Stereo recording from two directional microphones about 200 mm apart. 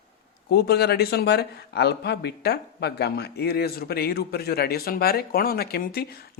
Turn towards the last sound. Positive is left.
turn(degrees=50)  # may be behind; listen again after turning